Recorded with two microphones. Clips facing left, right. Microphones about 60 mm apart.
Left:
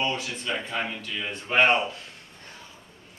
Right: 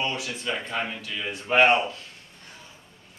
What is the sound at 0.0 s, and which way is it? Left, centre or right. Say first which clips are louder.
Speech: even; centre.